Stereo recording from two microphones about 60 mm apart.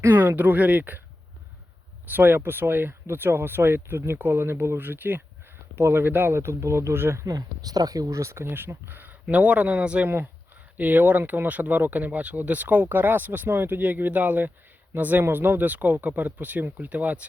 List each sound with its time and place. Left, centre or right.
0.0 s speech: right
2.0 s speech: right
7.3 s speech: right
8.2 s speech: right
8.9 s a sound: right
9.2 s speech: right